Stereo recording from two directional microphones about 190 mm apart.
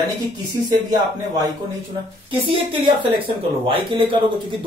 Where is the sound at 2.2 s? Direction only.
25° right (ahead or behind).